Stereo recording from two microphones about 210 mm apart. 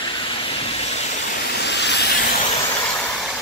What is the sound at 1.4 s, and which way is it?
Vehicle, 50° left (ahead or behind).